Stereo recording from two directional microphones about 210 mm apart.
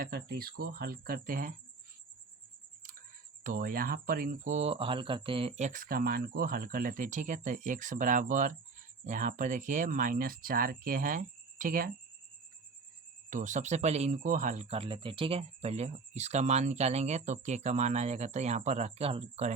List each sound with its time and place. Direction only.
0.0 s speech: 45° right (ahead or behind)
3.4 s speech: 40° right (ahead or behind)
13.3 s speech: 35° right (ahead or behind)